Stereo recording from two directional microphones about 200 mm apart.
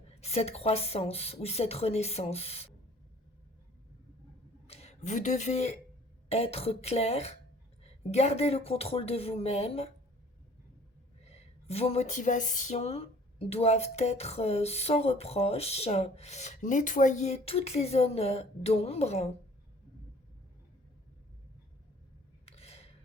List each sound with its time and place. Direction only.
0.2 s speech: 30° left (ahead or behind)
4.6 s speech: 30° left (ahead or behind)
11.2 s speech: 30° left (ahead or behind)
22.4 s a sound: 30° left (ahead or behind)